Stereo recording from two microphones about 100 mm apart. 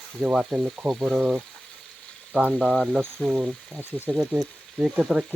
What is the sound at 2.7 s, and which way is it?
Speech, centre (ahead or behind).